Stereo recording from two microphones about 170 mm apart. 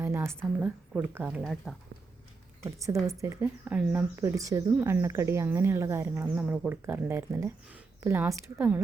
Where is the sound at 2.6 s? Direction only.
20° right (ahead or behind).